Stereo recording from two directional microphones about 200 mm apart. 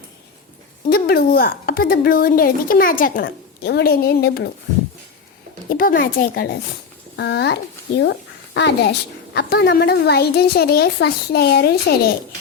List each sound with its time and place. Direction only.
0.9 s a woman's voice: 50° left (ahead or behind)
5.6 s a woman's voice: 45° left (ahead or behind)